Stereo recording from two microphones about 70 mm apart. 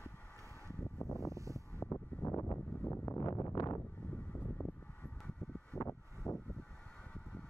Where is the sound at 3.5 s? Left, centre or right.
Left.